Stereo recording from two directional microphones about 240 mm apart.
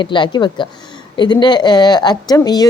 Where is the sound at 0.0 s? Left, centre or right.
Centre.